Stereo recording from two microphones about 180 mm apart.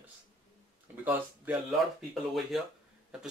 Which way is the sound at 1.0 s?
10° right (ahead or behind).